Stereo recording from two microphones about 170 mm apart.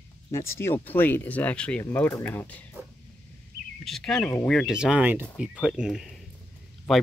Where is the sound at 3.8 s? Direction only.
Centre (ahead or behind).